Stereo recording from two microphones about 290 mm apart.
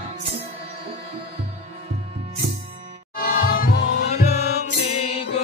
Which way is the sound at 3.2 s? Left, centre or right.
Left.